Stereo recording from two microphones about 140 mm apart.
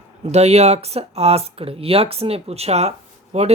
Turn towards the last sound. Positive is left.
turn(degrees=-50)  # may be behind; listen again after turning